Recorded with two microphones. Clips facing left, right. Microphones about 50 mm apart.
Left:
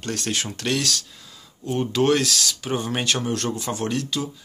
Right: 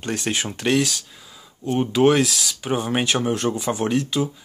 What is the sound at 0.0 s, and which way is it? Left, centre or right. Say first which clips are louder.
Speech: right 2 dB; centre.